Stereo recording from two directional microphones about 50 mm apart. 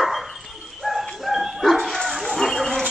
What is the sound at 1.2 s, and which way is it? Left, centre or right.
Dog, centre.